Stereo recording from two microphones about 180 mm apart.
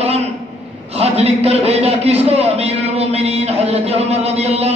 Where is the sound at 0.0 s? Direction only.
35° right (ahead or behind).